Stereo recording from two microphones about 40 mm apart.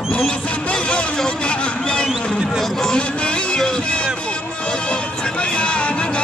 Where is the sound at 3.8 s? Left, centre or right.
Left.